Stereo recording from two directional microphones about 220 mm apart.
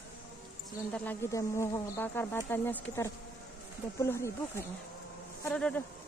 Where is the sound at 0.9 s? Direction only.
5° left (ahead or behind).